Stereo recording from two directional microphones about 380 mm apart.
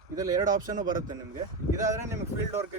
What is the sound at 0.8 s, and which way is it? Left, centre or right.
Speech, right.